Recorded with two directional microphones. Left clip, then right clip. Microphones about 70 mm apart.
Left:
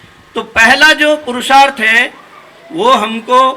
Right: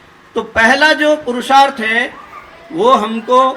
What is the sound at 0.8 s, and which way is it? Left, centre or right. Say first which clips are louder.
Speech: left 4 dB; left.